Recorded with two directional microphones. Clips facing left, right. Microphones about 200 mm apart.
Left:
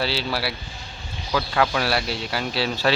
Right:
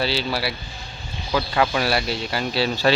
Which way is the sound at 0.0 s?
5° left (ahead or behind).